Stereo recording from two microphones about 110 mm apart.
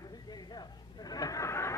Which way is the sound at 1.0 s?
35° left (ahead or behind).